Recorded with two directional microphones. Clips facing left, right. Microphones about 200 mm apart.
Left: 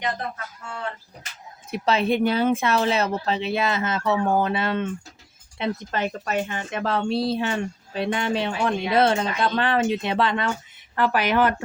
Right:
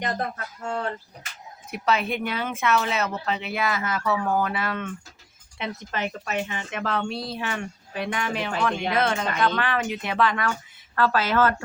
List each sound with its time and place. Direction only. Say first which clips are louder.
0.0 s speech: even; 40° right (ahead or behind)
1.7 s speech: left 4 dB; 30° left (ahead or behind)